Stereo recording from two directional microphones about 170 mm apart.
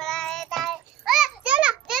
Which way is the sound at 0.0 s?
5° left (ahead or behind).